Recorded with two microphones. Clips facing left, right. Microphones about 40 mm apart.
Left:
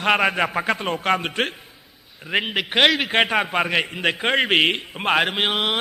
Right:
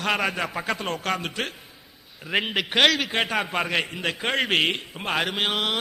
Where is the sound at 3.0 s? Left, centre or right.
Left.